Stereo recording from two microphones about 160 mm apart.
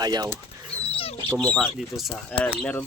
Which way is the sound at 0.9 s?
40° left (ahead or behind).